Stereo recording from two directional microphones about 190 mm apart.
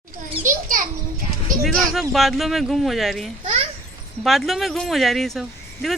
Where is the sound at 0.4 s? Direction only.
45° right (ahead or behind).